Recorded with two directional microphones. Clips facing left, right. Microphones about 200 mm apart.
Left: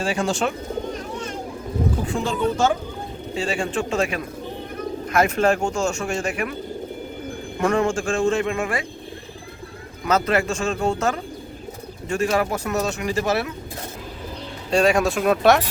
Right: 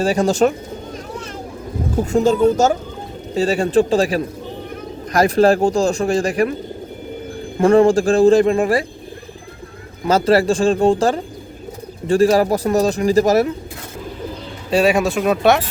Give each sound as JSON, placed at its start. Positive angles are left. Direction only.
{"t": 0.0, "sound": "speech", "side_deg": -40}
{"t": 2.0, "sound": "speech", "side_deg": -40}
{"t": 7.6, "sound": "speech", "side_deg": -35}
{"t": 10.0, "sound": "speech", "side_deg": -30}
{"t": 14.7, "sound": "speech", "side_deg": -5}